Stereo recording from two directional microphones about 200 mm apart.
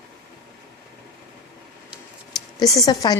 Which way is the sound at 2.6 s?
20° left (ahead or behind).